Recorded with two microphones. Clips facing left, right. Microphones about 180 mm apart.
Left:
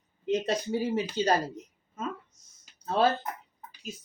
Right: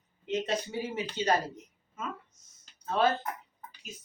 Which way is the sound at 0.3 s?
35° left (ahead or behind).